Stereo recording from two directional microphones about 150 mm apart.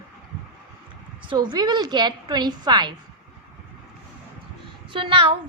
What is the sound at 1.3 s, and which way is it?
A woman's voice, 30° right (ahead or behind).